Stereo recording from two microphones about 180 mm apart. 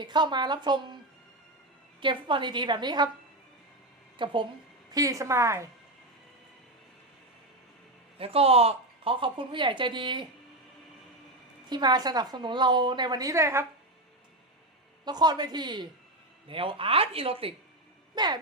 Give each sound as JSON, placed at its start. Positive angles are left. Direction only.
{"t": 0.0, "sound": "a woman's voice", "side_deg": -25}
{"t": 2.0, "sound": "a woman's voice", "side_deg": -25}
{"t": 4.2, "sound": "a woman's voice", "side_deg": -25}
{"t": 8.2, "sound": "a woman's voice", "side_deg": -35}
{"t": 11.7, "sound": "a woman's voice", "side_deg": -25}
{"t": 15.0, "sound": "a woman's voice", "side_deg": -25}